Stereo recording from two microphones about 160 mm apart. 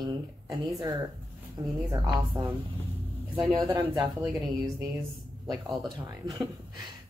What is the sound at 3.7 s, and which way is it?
Speech, 25° right (ahead or behind).